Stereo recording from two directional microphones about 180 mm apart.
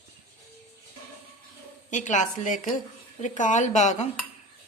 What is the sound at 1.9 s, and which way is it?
A woman's voice, 45° left (ahead or behind).